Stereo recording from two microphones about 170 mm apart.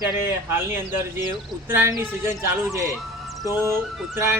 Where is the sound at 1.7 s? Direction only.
15° right (ahead or behind).